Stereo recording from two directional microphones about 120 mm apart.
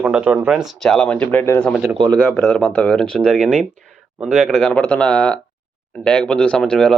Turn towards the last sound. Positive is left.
turn(degrees=5)  # may be behind; listen again after turning